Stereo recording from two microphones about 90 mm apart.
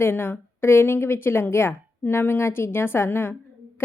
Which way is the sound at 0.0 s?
25° left (ahead or behind).